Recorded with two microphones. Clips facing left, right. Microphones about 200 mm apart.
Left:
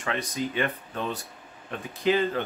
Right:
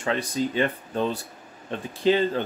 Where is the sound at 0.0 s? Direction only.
30° right (ahead or behind).